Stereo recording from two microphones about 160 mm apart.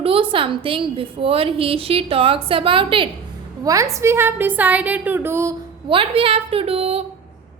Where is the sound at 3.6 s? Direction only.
20° right (ahead or behind).